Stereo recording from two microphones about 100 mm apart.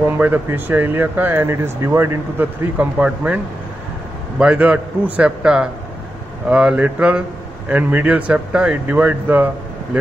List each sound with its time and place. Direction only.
0.2 s speech: 20° right (ahead or behind)
4.4 s a man's voice: 10° right (ahead or behind)